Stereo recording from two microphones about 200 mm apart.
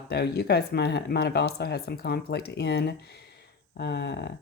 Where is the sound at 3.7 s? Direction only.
55° left (ahead or behind).